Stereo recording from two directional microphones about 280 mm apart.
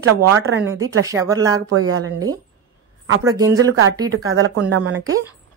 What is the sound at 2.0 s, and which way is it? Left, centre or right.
Speech, centre.